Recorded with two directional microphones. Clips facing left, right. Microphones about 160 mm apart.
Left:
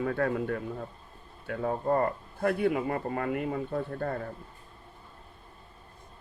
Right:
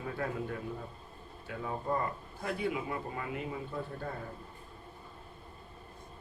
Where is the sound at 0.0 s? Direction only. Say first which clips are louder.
Left 8 dB; 60° left (ahead or behind).